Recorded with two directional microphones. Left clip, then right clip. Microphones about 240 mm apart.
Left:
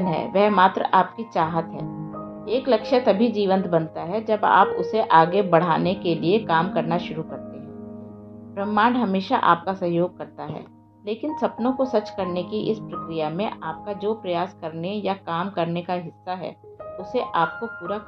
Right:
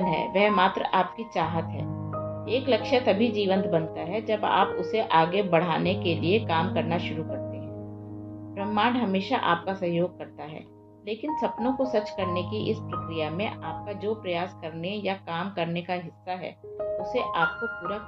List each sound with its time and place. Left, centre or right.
0.0 s speech: left
8.5 s speech: left